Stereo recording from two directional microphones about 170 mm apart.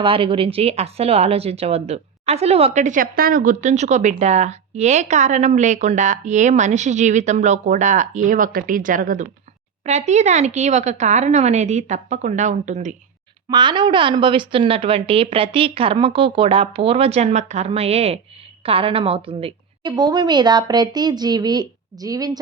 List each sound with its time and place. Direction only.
0.0 s a woman's voice: 30° right (ahead or behind); by 13.0 s 45° right (ahead or behind)
13.5 s a woman's voice: 25° right (ahead or behind)